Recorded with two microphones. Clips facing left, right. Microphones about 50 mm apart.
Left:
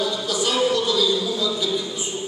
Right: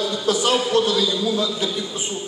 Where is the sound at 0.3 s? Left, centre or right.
Right.